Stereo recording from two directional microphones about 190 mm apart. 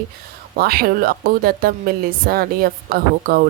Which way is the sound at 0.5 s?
50° right (ahead or behind).